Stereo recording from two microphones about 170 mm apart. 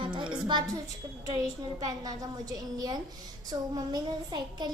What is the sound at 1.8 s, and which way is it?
A child's voice, 20° right (ahead or behind).